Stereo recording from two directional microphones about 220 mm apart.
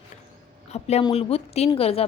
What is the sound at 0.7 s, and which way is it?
A woman's voice, 30° left (ahead or behind).